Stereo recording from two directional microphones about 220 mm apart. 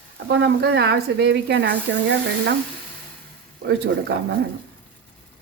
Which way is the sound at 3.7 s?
50° right (ahead or behind).